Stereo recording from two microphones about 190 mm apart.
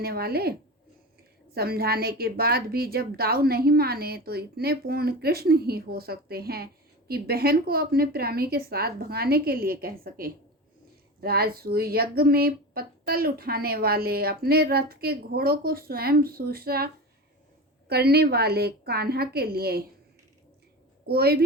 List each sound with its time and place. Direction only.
0.0 s a woman's voice: 55° right (ahead or behind)
1.5 s a woman's voice: 55° right (ahead or behind)
21.1 s a woman's voice: 55° right (ahead or behind)